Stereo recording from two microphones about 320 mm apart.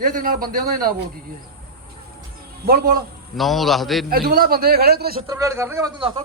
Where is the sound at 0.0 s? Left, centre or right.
Right.